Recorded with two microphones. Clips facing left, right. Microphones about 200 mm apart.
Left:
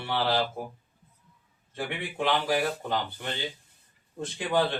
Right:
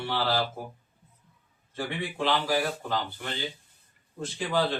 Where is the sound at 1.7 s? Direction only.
15° left (ahead or behind).